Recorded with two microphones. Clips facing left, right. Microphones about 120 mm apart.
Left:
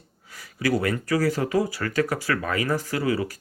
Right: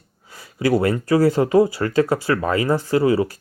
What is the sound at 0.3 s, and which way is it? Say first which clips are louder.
Speech: right 5 dB; 25° right (ahead or behind).